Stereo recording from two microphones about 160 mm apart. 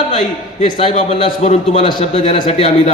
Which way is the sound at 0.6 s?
40° left (ahead or behind).